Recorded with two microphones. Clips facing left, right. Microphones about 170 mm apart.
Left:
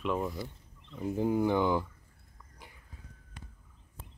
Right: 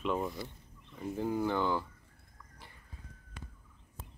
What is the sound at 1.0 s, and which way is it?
Speech, 15° left (ahead or behind).